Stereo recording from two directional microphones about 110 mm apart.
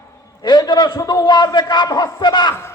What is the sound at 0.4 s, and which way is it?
A man's voice, 40° left (ahead or behind).